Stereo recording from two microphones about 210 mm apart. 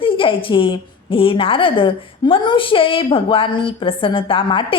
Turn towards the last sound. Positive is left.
turn(degrees=25)  # may be behind; listen again after turning